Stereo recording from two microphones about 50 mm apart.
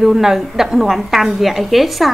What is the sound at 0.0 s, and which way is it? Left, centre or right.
A woman's voice, centre.